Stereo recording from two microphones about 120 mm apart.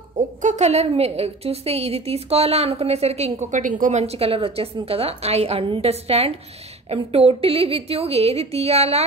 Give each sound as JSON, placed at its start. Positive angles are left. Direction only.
{"t": 0.1, "sound": "a woman's voice", "side_deg": -90}